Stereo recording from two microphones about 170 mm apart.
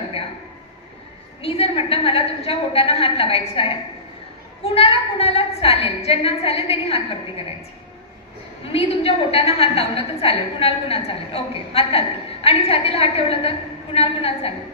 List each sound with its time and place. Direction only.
1.4 s a woman's voice: 35° left (ahead or behind)
8.7 s a woman's voice: 35° left (ahead or behind)